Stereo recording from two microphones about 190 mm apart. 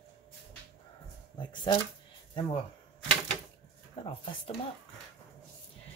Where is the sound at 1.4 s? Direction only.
25° left (ahead or behind).